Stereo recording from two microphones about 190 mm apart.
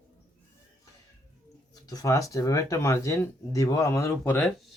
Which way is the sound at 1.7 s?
20° left (ahead or behind).